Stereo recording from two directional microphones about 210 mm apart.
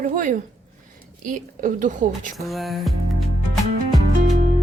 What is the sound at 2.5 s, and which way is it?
Music, centre (ahead or behind).